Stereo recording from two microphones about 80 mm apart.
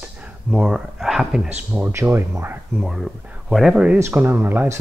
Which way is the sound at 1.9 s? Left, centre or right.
Right.